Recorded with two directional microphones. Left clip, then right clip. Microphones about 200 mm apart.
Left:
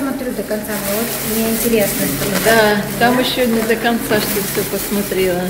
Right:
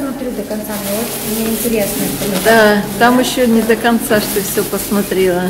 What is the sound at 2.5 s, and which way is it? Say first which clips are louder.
Speech: right 5 dB; 25° right (ahead or behind).